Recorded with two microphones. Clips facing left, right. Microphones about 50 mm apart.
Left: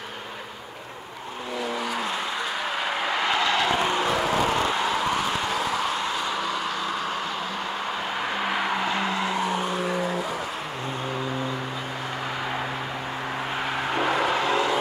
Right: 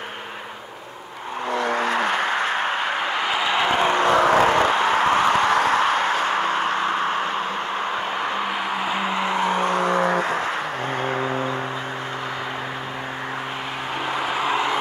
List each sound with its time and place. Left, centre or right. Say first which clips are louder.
1.6 s vehicle: right 6 dB; right
3.3 s a sound: left 1 dB; centre
3.7 s vehicle: right 6 dB; right
8.5 s a sound: even; centre
8.8 s vehicle: right 2 dB; centre
9.2 s vehicle: right 4 dB; right
13.9 s music: left 1 dB; centre